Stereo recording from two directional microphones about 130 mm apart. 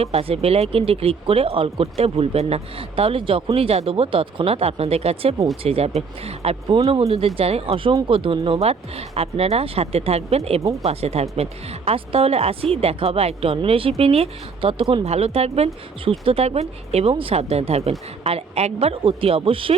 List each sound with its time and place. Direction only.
0.0 s speech: 50° right (ahead or behind)